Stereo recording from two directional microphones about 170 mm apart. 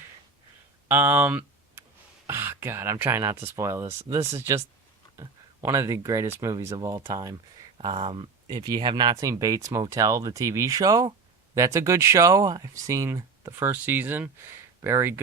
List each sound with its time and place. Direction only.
0.9 s speech: 10° right (ahead or behind)